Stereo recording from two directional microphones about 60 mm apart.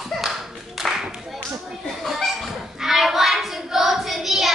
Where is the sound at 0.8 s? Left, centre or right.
Centre.